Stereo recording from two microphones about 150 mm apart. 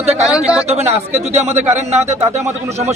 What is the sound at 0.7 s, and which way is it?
A man's voice, 45° right (ahead or behind).